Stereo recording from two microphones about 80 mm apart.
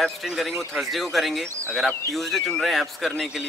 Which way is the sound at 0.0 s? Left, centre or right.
Centre.